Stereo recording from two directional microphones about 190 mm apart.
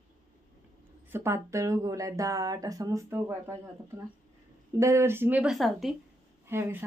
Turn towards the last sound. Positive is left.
turn(degrees=-15)  # may be behind; listen again after turning